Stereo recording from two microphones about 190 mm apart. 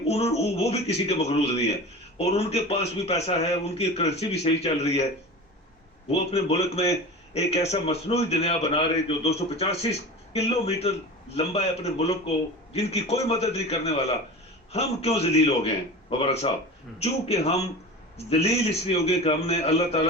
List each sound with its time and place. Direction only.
0.1 s a man's voice: 35° left (ahead or behind)
6.1 s a man's voice: 35° left (ahead or behind)